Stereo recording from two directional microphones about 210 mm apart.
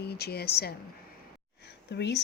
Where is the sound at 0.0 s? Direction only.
50° left (ahead or behind).